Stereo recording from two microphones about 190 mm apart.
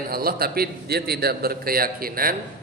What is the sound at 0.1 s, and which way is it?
A man's voice, 55° right (ahead or behind).